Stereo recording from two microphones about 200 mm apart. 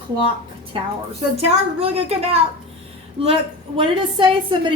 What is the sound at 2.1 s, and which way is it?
A woman's voice, 30° right (ahead or behind).